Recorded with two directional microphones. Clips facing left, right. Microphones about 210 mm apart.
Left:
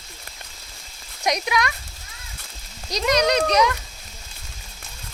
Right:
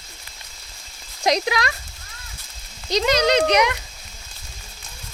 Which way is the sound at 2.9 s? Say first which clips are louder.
Right 2 dB; 25° right (ahead or behind).